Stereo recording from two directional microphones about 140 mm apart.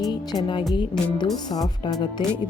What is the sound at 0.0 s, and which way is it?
Speech, 30° left (ahead or behind).